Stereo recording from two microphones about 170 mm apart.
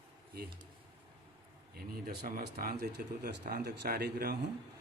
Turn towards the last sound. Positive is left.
turn(degrees=-65)  # may be behind; listen again after turning